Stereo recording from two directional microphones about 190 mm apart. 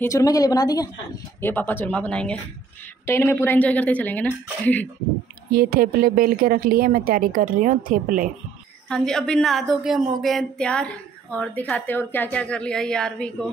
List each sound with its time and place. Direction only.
0.0 s speech: 15° left (ahead or behind)
5.5 s a woman's voice: 50° right (ahead or behind)
8.8 s a woman's voice: 5° left (ahead or behind)